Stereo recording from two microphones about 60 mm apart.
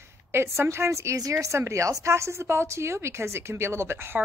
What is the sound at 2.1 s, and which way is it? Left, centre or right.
A woman's voice, right.